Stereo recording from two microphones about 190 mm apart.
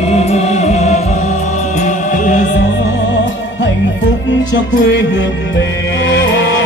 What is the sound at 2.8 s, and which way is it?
Music, 65° left (ahead or behind).